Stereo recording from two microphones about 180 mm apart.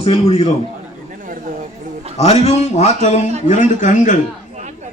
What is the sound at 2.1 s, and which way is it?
A man's voice, 35° left (ahead or behind).